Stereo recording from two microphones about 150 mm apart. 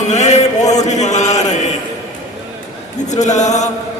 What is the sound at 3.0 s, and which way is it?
Chant, 50° left (ahead or behind).